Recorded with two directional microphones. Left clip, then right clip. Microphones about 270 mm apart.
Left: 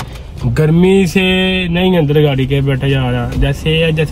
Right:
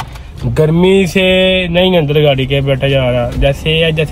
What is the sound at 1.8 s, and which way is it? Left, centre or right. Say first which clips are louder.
Speech: even; left.